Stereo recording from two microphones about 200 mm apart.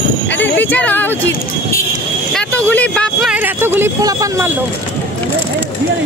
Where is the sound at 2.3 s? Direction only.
5° left (ahead or behind); by 4.5 s 15° right (ahead or behind).